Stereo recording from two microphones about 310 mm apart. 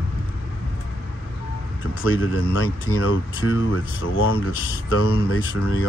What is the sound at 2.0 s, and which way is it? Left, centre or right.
Speech, left.